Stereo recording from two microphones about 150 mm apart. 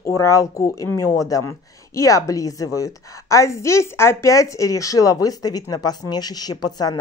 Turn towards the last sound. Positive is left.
turn(degrees=25)  # may be behind; listen again after turning